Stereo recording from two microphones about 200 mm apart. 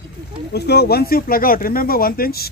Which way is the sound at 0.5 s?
55° left (ahead or behind).